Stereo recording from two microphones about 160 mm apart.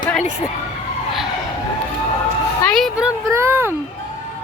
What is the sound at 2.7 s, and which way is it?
Speech, 5° right (ahead or behind).